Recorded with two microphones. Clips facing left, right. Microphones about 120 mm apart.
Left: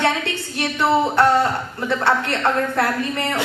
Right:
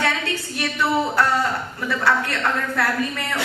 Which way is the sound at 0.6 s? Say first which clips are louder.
Left 4 dB; 25° left (ahead or behind).